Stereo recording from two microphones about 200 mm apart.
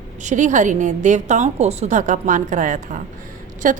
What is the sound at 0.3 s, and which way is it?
A woman's voice, 35° right (ahead or behind).